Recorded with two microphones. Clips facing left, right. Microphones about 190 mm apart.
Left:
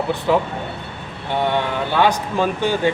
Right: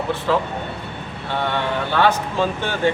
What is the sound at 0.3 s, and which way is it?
Speech, 15° left (ahead or behind).